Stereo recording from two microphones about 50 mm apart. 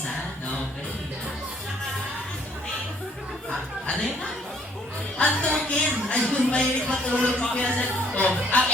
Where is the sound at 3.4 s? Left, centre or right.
Centre.